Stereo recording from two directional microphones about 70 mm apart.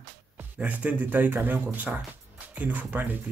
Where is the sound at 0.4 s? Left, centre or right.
Right.